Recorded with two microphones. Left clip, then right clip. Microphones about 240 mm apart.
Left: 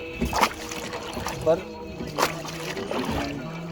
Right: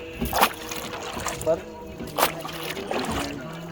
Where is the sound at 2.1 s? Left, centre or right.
Right.